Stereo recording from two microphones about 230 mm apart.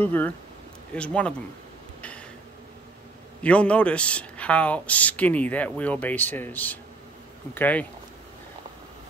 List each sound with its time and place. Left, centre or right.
0.0 s speech: centre
2.0 s a sound: centre
3.4 s speech: centre